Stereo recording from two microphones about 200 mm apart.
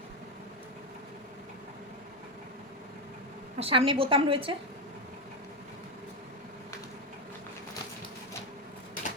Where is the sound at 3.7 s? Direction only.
25° right (ahead or behind).